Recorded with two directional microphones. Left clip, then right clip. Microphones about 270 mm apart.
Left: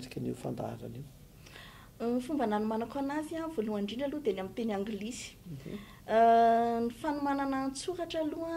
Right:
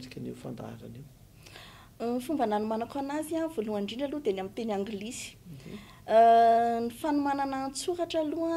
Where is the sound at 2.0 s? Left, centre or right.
Right.